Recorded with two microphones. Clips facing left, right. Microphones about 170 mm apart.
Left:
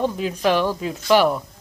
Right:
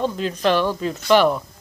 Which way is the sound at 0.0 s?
10° left (ahead or behind).